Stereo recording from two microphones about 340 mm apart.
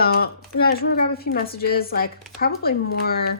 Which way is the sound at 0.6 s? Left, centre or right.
Left.